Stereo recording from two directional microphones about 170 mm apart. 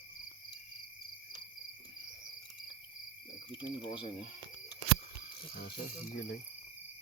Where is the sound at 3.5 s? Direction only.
30° left (ahead or behind).